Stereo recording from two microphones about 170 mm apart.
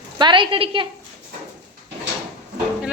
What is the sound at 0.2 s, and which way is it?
Speech, 30° right (ahead or behind).